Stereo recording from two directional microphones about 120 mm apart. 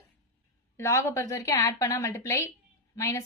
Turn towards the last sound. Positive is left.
turn(degrees=25)  # may be behind; listen again after turning